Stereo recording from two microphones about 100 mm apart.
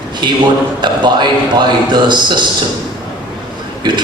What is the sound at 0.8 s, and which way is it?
A man's voice, 50° right (ahead or behind).